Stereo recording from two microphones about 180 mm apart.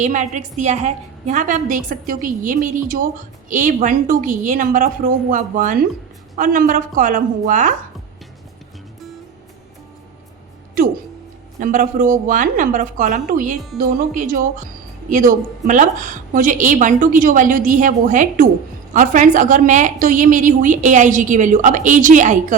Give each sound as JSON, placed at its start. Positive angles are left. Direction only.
{"t": 0.0, "sound": "a woman's voice", "side_deg": -40}
{"t": 10.8, "sound": "a sound", "side_deg": -50}
{"t": 11.6, "sound": "a woman's voice", "side_deg": -45}